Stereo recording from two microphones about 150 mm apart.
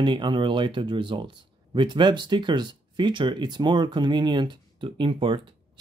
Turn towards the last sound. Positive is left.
turn(degrees=-35)  # may be behind; listen again after turning